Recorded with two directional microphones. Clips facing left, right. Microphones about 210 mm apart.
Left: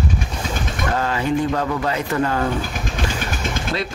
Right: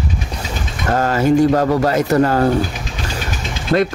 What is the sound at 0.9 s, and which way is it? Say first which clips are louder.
Speech: right 8 dB; 45° right (ahead or behind).